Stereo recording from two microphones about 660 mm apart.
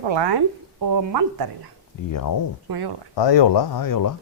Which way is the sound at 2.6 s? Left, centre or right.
Right.